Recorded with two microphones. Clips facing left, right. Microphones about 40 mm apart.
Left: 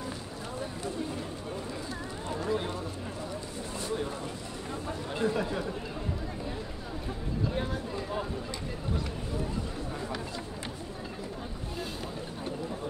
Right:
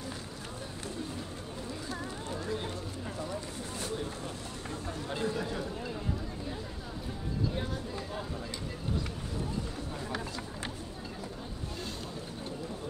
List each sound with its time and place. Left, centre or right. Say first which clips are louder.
2.3 s run: left 6 dB; centre
4.8 s chatter: left 4 dB; left
7.5 s a sound: left 3 dB; centre